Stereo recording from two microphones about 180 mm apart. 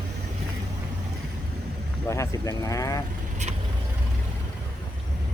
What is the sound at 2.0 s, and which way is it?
Speech, 15° left (ahead or behind).